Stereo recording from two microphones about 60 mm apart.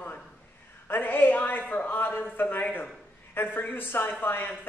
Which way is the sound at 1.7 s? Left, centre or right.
Left.